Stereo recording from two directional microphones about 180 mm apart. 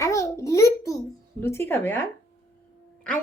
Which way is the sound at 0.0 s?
15° left (ahead or behind).